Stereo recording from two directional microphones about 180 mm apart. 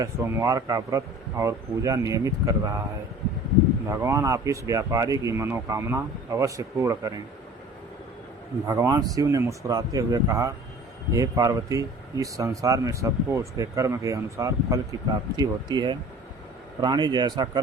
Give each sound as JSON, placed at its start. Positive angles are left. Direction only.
{"t": 0.0, "sound": "speech", "side_deg": -20}
{"t": 3.8, "sound": "speech", "side_deg": -15}
{"t": 8.6, "sound": "speech", "side_deg": -15}